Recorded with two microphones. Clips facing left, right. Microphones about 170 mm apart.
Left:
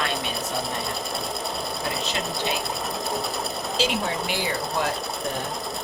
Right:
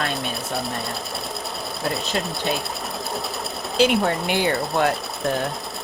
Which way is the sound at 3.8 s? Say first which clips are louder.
Right 8 dB; 60° right (ahead or behind).